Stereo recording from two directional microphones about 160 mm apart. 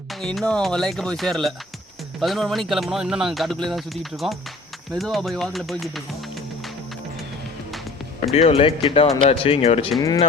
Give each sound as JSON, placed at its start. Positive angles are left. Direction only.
{"t": 0.1, "sound": "speech", "side_deg": 0}
{"t": 8.2, "sound": "speech", "side_deg": 40}